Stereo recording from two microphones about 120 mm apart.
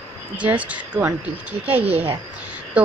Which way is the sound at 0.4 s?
10° right (ahead or behind).